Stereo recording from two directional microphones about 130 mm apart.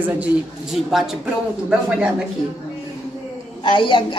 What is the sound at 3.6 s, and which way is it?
Speech, 40° left (ahead or behind).